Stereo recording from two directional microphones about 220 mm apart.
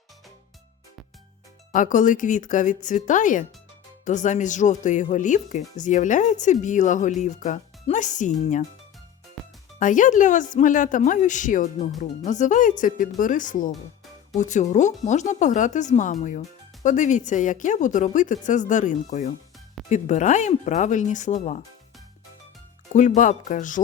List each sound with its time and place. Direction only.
1.7 s speech: 35° left (ahead or behind)
9.4 s music: centre (ahead or behind)
9.7 s speech: 35° left (ahead or behind)
22.9 s speech: 35° left (ahead or behind)